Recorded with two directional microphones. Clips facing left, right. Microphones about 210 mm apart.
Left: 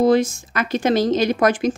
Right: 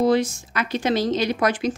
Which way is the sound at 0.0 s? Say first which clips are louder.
Left 3 dB; 45° left (ahead or behind).